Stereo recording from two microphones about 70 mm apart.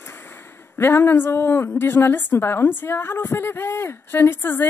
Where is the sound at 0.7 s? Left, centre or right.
Left.